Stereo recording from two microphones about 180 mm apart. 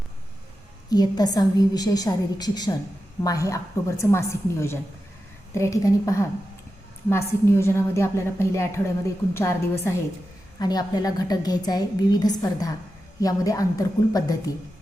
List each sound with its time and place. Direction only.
0.9 s a woman's voice: 20° left (ahead or behind)